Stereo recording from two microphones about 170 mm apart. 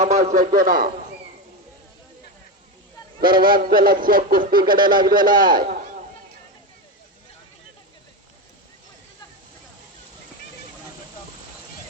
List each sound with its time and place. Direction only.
0.0 s a man's voice: 45° right (ahead or behind)
3.3 s speech: 55° right (ahead or behind)
4.8 s speech: 25° right (ahead or behind)
5.0 s speech: 55° right (ahead or behind)
5.5 s a sound: 60° right (ahead or behind)